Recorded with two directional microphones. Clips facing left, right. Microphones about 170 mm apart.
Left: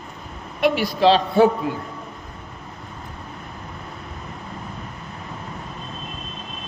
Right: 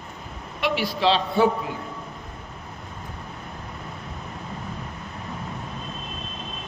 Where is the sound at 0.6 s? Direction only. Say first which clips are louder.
Left 5 dB; 45° left (ahead or behind).